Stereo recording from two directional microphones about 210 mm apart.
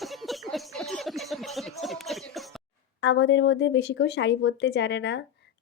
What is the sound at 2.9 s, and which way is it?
A woman's voice, 60° left (ahead or behind).